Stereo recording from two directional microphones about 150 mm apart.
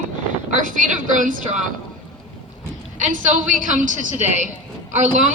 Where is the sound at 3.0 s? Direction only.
60° right (ahead or behind).